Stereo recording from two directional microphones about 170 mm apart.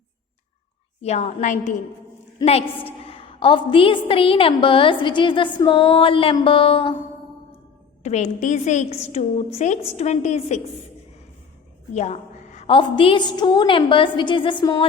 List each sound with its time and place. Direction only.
1.0 s a woman's voice: 40° left (ahead or behind)
8.0 s a woman's voice: 45° left (ahead or behind)
11.9 s a woman's voice: 45° left (ahead or behind); by 14.8 s 25° left (ahead or behind)